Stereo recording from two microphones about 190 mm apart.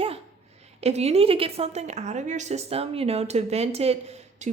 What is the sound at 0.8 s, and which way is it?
A woman's voice, 35° right (ahead or behind).